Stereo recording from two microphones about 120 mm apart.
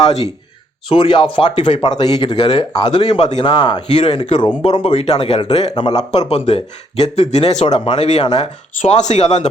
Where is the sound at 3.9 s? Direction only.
65° left (ahead or behind).